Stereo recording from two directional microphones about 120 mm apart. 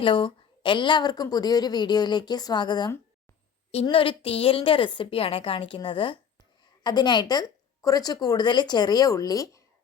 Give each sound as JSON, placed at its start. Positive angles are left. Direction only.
{"t": 0.0, "sound": "a woman's voice", "side_deg": 45}
{"t": 3.9, "sound": "a woman's voice", "side_deg": 45}